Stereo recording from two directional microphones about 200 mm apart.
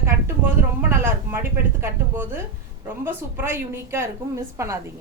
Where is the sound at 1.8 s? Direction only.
10° right (ahead or behind).